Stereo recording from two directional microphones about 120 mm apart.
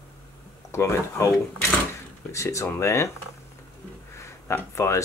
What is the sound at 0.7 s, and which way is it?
Speech, 20° left (ahead or behind).